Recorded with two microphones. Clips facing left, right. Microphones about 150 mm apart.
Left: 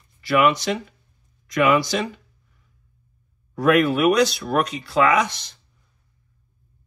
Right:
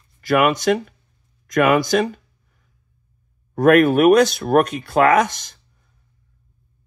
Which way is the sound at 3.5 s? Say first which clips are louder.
Right 5 dB; 50° right (ahead or behind).